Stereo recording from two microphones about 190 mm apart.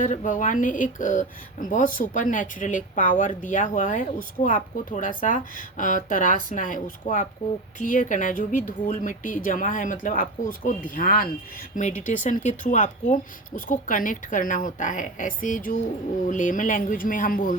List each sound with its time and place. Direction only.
0.0 s speech: 40° left (ahead or behind)